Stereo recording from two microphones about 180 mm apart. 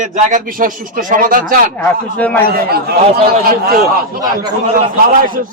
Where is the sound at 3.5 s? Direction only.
55° right (ahead or behind).